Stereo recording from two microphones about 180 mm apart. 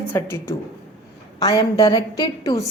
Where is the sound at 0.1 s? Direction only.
15° left (ahead or behind).